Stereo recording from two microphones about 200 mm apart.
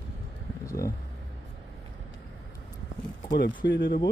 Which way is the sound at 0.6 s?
15° left (ahead or behind).